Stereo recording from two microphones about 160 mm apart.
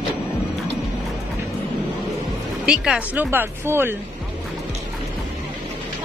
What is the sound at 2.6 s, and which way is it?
Speech, 5° right (ahead or behind).